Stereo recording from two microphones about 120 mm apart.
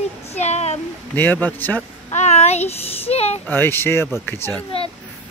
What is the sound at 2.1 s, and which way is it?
A child's voice, 70° left (ahead or behind).